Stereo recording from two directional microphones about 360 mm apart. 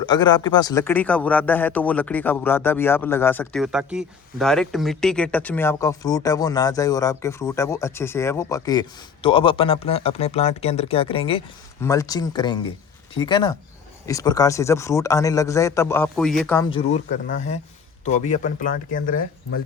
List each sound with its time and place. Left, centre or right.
0.0 s speech: centre